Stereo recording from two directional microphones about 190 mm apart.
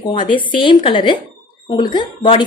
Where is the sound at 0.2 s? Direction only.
25° left (ahead or behind).